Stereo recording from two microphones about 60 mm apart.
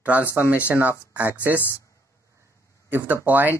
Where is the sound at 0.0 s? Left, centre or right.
Right.